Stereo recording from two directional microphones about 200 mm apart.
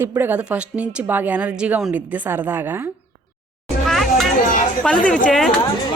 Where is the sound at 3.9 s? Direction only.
Centre (ahead or behind).